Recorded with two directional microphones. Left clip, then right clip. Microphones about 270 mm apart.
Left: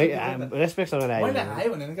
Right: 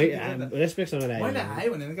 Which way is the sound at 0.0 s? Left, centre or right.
Centre.